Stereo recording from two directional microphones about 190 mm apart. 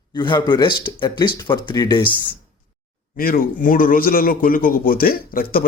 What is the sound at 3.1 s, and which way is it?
A man's voice, 50° left (ahead or behind).